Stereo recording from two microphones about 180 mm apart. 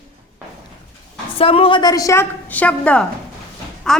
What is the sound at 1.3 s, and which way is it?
A woman's voice, 30° left (ahead or behind).